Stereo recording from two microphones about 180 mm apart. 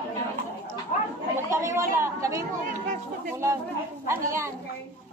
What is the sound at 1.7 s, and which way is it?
Speech, 15° right (ahead or behind).